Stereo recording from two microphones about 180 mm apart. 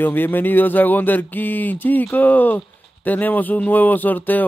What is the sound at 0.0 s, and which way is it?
Speech, 10° left (ahead or behind).